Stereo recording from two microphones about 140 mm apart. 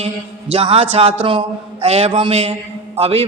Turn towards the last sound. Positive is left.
turn(degrees=-45)  # may be behind; listen again after turning